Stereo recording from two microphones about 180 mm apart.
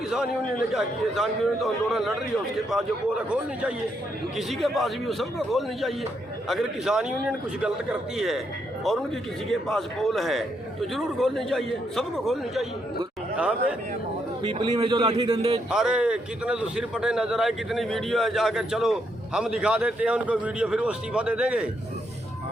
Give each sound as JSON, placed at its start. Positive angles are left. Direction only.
{"t": 0.7, "sound": "a man's voice", "side_deg": 0}
{"t": 14.4, "sound": "a man's voice", "side_deg": -25}
{"t": 15.7, "sound": "a man's voice", "side_deg": -5}